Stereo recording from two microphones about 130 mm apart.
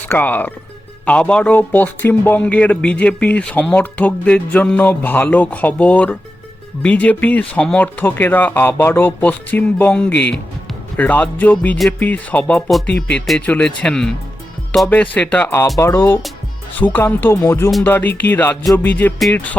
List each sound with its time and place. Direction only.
0.1 s speech: 15° left (ahead or behind)